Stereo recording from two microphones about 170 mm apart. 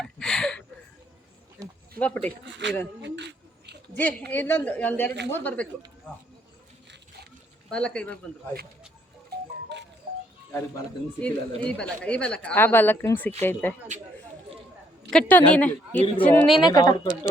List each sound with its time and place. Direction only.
0.0 s a sound: 5° left (ahead or behind)
2.0 s a woman's voice: 10° left (ahead or behind)
2.4 s speech: 90° right
3.0 s a sound: 90° right
4.3 s a woman's voice: 10° left (ahead or behind)
7.7 s a woman's voice: 5° left (ahead or behind)
11.2 s a woman's voice: 5° left (ahead or behind)
15.1 s a woman's voice: 10° left (ahead or behind)
16.6 s a woman's voice: 25° left (ahead or behind)